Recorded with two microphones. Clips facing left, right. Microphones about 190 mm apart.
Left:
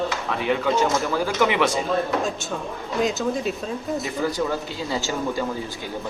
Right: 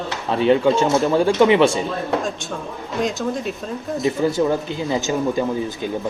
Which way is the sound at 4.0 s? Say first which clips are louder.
Right 8 dB; 25° right (ahead or behind).